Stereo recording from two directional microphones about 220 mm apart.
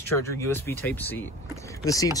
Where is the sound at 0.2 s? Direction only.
10° left (ahead or behind).